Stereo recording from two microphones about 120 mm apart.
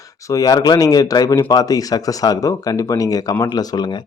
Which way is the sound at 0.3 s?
30° left (ahead or behind).